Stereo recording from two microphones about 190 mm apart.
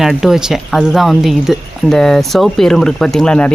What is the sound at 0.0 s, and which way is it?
Speech, centre (ahead or behind).